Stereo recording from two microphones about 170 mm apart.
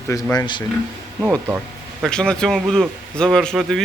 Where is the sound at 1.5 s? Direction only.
10° right (ahead or behind).